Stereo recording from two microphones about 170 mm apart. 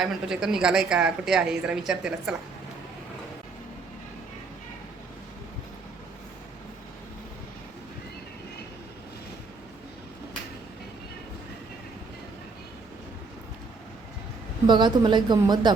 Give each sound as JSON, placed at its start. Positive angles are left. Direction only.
{"t": 0.0, "sound": "a woman's voice", "side_deg": -5}
{"t": 14.7, "sound": "speech", "side_deg": -25}